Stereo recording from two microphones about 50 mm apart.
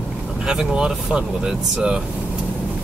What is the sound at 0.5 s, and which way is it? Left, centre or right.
Speech, centre.